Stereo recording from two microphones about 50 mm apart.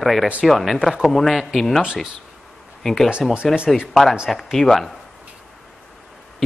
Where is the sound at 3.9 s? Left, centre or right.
Centre.